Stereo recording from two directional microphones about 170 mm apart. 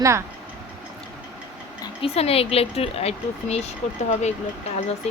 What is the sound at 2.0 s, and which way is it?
Speech, 35° left (ahead or behind).